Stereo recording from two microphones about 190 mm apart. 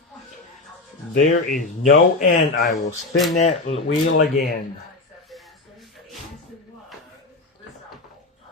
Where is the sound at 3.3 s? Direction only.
30° left (ahead or behind).